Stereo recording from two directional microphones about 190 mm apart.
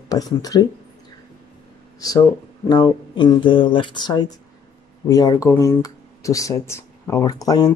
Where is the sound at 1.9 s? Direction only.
20° left (ahead or behind).